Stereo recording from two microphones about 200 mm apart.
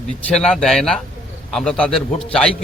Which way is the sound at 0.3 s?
5° left (ahead or behind).